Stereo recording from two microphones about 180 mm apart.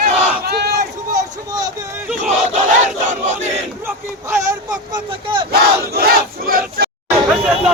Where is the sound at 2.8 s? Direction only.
40° right (ahead or behind).